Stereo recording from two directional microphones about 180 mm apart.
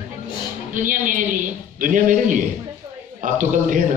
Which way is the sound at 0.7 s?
45° right (ahead or behind).